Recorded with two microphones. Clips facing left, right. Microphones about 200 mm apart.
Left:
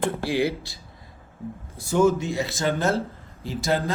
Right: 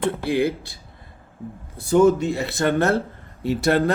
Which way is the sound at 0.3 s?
55° right (ahead or behind).